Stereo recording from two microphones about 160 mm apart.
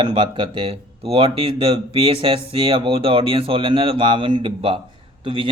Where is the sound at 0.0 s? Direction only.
35° right (ahead or behind).